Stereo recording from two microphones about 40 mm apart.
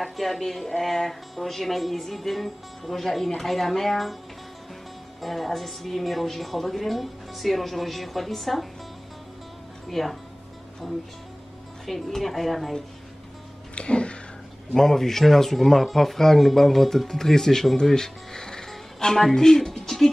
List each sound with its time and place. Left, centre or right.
0.0 s speech: centre
5.2 s speech: centre
9.8 s speech: centre
11.8 s speech: centre
13.7 s a sound: left
14.7 s speech: centre